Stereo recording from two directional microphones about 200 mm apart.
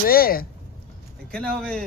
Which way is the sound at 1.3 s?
5° left (ahead or behind).